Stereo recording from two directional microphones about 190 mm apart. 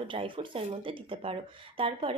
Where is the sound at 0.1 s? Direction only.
25° right (ahead or behind).